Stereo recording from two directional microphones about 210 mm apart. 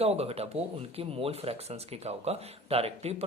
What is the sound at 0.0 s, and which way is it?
Speech, 30° right (ahead or behind).